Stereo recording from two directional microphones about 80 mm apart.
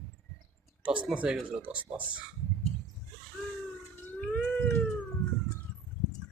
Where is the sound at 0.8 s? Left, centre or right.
Centre.